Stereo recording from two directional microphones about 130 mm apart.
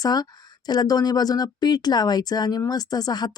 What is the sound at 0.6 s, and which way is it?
Speech, 30° left (ahead or behind).